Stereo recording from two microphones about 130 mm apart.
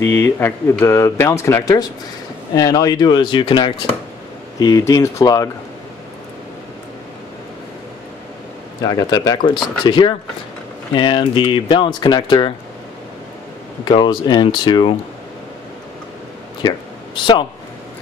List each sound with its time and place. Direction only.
0.0 s speech: 20° left (ahead or behind)
8.8 s speech: 30° left (ahead or behind)
13.8 s speech: 35° left (ahead or behind)
16.6 s a sound: 35° left (ahead or behind)